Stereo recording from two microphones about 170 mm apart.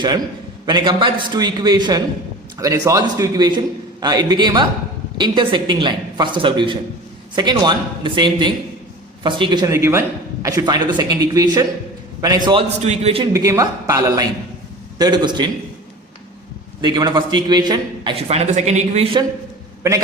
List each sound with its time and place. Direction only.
0.6 s a man's voice: 25° right (ahead or behind)
12.8 s a man's voice: 40° right (ahead or behind)
13.3 s a man's voice: 20° right (ahead or behind)
16.8 s a man's voice: 25° right (ahead or behind)